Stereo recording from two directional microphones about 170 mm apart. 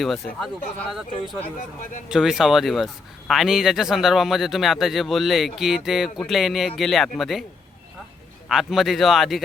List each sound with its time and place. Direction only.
0.0 s speech: centre (ahead or behind)
1.5 s a man's voice: 50° left (ahead or behind)
2.0 s speech: 5° right (ahead or behind)
8.4 s speech: centre (ahead or behind)